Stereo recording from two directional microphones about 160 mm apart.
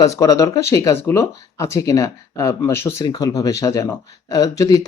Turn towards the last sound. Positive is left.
turn(degrees=25)  # may be behind; listen again after turning